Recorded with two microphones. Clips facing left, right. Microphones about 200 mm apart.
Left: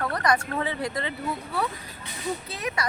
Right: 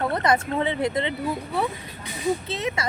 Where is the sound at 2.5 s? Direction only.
25° right (ahead or behind).